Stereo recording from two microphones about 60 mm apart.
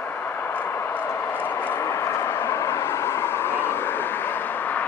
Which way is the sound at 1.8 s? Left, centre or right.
Left.